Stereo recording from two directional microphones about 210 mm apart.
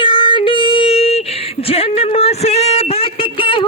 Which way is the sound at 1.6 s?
30° left (ahead or behind).